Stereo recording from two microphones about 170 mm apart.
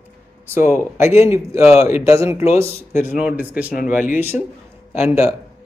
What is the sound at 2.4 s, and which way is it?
Speech, 35° left (ahead or behind).